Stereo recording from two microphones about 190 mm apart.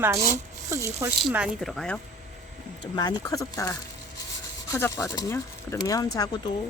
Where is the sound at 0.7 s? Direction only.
15° right (ahead or behind); by 2.0 s centre (ahead or behind).